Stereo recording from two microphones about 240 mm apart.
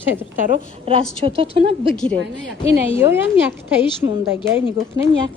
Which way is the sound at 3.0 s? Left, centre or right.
Centre.